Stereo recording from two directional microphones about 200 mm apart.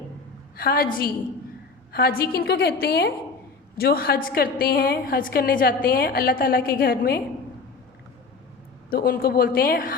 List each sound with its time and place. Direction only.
0.5 s a woman's voice: 50° left (ahead or behind)
8.9 s a woman's voice: 50° left (ahead or behind)